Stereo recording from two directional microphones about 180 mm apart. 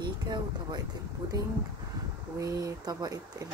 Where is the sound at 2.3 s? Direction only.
20° right (ahead or behind).